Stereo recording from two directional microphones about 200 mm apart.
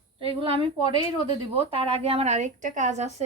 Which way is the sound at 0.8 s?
30° left (ahead or behind).